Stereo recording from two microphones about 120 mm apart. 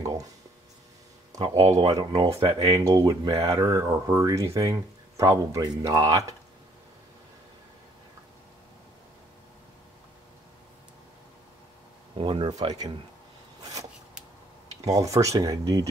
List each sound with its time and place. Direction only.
0.0 s a sound: 30° right (ahead or behind)
1.5 s speech: 55° right (ahead or behind)
2.2 s speech: 45° right (ahead or behind)
2.9 s speech: 30° right (ahead or behind)
12.2 s speech: 45° right (ahead or behind)
14.9 s speech: 30° right (ahead or behind)